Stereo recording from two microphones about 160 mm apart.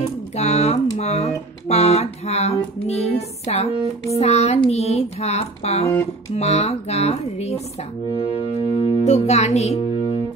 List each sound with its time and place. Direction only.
0.4 s speech: 45° left (ahead or behind)